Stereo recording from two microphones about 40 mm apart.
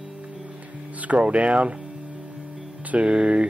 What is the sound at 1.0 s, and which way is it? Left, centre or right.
Speech, right.